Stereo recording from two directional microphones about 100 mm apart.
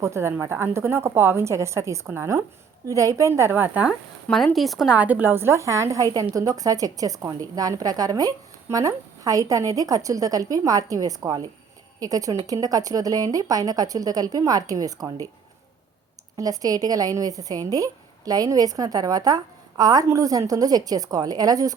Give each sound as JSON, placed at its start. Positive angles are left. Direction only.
{"t": 0.0, "sound": "a woman's voice", "side_deg": -30}
{"t": 4.5, "sound": "speech", "side_deg": 0}
{"t": 4.9, "sound": "speech", "side_deg": -15}
{"t": 16.4, "sound": "speech", "side_deg": -40}